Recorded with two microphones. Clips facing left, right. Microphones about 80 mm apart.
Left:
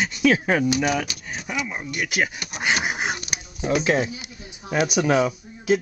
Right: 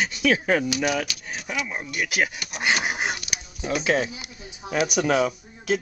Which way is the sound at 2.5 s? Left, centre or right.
Centre.